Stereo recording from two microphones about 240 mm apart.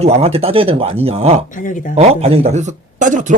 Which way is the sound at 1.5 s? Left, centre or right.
Left.